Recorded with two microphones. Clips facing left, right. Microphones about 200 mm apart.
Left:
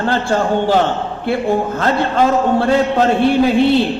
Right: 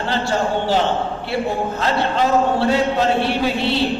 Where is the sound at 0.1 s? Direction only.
50° left (ahead or behind).